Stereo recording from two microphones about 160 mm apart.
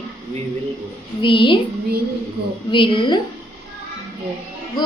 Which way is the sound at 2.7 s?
30° left (ahead or behind).